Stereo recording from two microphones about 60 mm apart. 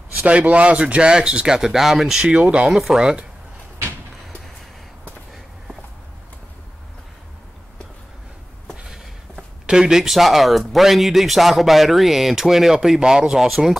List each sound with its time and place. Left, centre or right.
0.2 s speech: right; by 2.2 s centre
2.2 s speech: centre
2.7 s speech: centre
8.7 s a sound: centre
9.7 s speech: centre